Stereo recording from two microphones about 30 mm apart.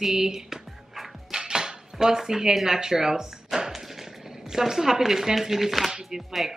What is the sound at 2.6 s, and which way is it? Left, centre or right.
Speech, centre.